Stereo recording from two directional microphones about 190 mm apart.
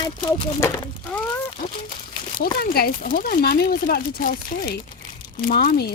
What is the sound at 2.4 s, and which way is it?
Speech, 55° left (ahead or behind).